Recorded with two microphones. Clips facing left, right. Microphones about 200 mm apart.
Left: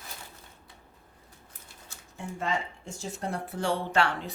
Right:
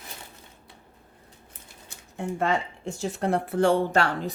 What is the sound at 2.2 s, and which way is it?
Speech, 60° right (ahead or behind).